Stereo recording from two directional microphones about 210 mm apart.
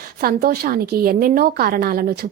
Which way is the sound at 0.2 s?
45° right (ahead or behind).